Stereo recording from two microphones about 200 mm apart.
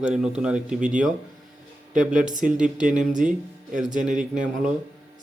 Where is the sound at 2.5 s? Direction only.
5° right (ahead or behind).